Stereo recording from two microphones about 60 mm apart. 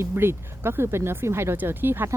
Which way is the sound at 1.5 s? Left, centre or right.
Right.